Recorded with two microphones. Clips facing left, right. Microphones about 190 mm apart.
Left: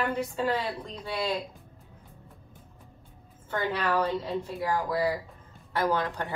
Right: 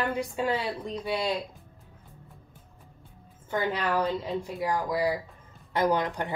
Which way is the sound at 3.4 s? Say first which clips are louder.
Right 1 dB; 15° right (ahead or behind).